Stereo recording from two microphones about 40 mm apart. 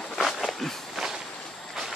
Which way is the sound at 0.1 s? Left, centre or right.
Centre.